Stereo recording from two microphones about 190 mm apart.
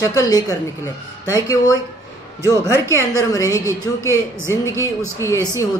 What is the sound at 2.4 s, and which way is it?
Speech, 15° right (ahead or behind).